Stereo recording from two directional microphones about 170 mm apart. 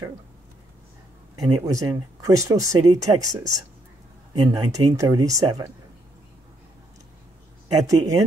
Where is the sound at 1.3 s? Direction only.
20° right (ahead or behind).